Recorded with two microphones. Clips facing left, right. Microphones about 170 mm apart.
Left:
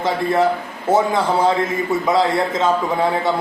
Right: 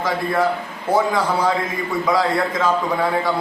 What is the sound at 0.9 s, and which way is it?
A man's voice, 25° left (ahead or behind).